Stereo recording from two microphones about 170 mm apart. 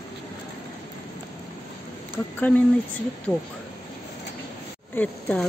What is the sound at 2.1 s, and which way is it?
Speech, 10° left (ahead or behind).